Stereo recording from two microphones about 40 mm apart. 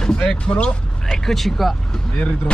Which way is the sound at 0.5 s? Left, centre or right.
Left.